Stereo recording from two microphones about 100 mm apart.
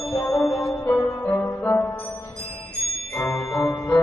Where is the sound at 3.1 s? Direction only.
30° left (ahead or behind).